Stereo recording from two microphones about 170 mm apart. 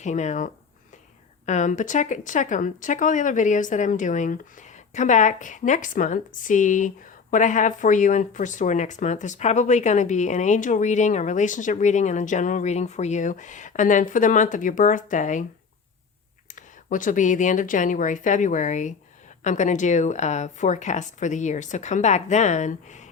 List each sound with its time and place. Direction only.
0.0 s a woman's voice: 45° left (ahead or behind)
16.6 s a woman's voice: 50° left (ahead or behind)